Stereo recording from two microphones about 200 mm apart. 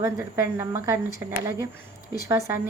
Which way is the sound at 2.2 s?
15° right (ahead or behind).